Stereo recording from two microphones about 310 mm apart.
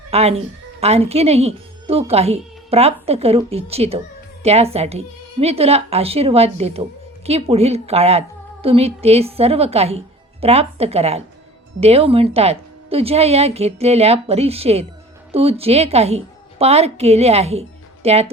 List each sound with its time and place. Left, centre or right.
0.1 s a woman's voice: centre